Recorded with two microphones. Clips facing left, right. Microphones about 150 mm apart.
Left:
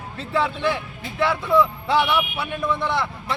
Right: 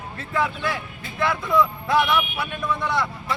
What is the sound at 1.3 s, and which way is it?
Speech, 10° left (ahead or behind).